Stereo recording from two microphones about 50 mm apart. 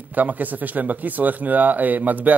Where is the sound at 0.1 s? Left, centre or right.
Right.